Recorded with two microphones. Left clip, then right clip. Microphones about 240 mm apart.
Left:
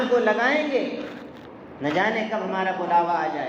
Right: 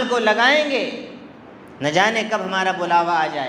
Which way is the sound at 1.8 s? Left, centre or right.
Right.